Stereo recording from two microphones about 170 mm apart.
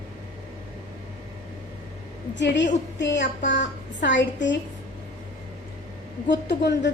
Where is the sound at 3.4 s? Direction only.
90° left.